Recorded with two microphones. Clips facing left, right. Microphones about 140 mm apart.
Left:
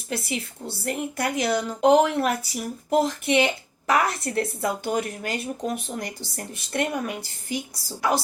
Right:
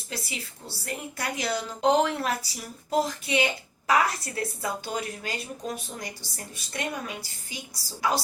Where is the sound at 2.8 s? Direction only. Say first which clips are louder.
Left 5 dB; 60° left (ahead or behind).